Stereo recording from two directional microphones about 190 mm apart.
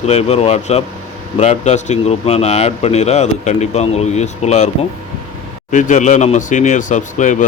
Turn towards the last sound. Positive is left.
turn(degrees=40)  # may be behind; listen again after turning